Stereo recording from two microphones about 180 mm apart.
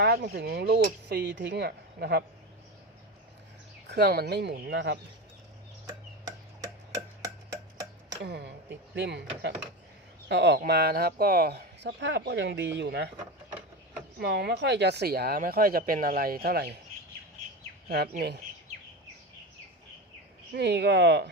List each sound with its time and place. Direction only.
0.0 s a sound: 65° right (ahead or behind)
0.3 s a woman's voice: 60° right (ahead or behind)
3.8 s speech: 65° right (ahead or behind)
5.8 s tick-tock: 20° right (ahead or behind)
8.2 s speech: 70° right (ahead or behind)
10.2 s speech: 70° right (ahead or behind)
14.2 s a woman's voice: 65° right (ahead or behind)
17.8 s a woman's voice: 60° right (ahead or behind)
20.5 s speech: 70° right (ahead or behind)